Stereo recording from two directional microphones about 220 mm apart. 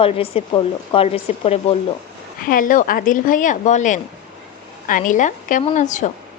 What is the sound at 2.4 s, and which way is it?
A woman's voice, 40° left (ahead or behind).